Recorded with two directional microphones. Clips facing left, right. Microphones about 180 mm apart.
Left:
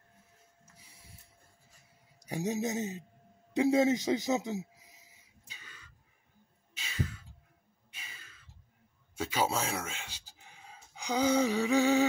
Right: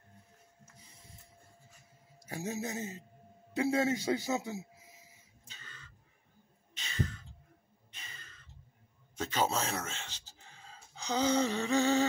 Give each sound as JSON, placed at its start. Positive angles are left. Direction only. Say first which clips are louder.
{"t": 0.7, "sound": "printer", "louder": "right 1 dB", "side_deg": 10}
{"t": 2.2, "sound": "a man's voice", "louder": "left 5 dB", "side_deg": 20}
{"t": 3.5, "sound": "a sound", "louder": "left 4 dB", "side_deg": 15}
{"t": 9.1, "sound": "speech", "louder": "left 1 dB", "side_deg": 10}